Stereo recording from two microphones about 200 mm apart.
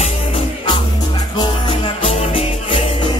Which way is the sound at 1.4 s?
25° left (ahead or behind).